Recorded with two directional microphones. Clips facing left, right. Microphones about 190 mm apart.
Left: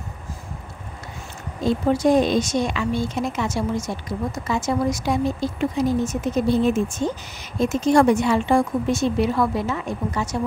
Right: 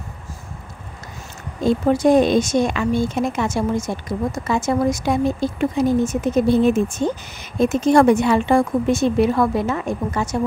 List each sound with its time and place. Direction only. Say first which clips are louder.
2.0 s speech: right 4 dB; 55° right (ahead or behind)